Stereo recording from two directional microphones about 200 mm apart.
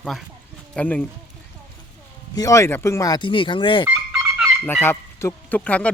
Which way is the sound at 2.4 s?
15° left (ahead or behind).